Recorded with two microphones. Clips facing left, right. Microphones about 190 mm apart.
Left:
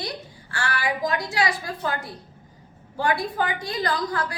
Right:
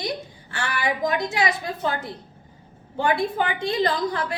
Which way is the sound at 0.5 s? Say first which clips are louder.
Right 1 dB; 20° right (ahead or behind).